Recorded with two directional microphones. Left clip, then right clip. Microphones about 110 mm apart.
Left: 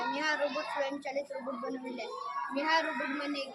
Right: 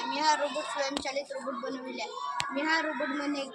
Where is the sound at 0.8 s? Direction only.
30° left (ahead or behind).